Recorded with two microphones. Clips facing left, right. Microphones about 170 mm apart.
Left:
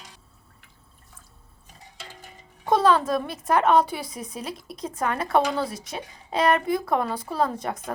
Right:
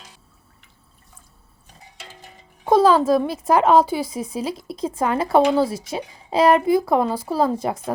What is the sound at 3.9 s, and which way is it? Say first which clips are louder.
Speech: right 9 dB; 90° right.